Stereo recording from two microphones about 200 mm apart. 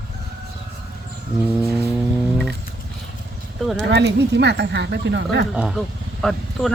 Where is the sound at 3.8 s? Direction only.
60° right (ahead or behind).